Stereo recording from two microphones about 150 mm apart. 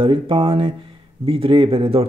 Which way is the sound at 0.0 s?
35° right (ahead or behind).